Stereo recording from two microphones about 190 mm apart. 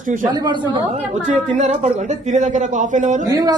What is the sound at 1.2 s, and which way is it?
Speech, 40° right (ahead or behind).